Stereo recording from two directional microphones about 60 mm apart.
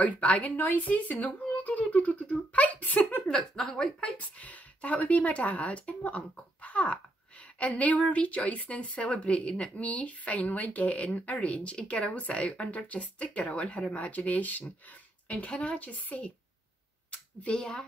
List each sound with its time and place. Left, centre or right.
0.0 s speech: left
3.3 s speech: centre
4.0 s speech: left
17.4 s speech: centre